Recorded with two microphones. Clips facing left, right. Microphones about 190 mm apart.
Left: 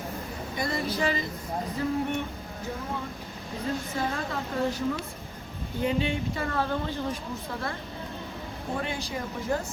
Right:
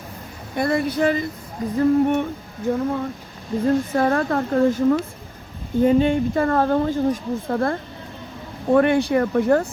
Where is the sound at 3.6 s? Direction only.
55° right (ahead or behind).